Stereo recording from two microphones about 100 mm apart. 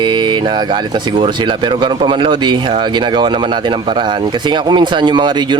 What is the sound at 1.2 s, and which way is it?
Speech, 55° right (ahead or behind).